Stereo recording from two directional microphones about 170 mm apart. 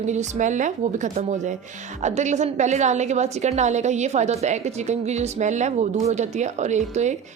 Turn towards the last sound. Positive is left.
turn(degrees=-40)  # may be behind; listen again after turning